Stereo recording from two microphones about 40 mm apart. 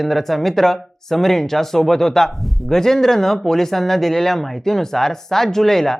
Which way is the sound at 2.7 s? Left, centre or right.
Centre.